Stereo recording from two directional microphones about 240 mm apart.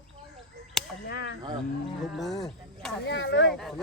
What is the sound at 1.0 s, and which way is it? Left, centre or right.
Speech, left.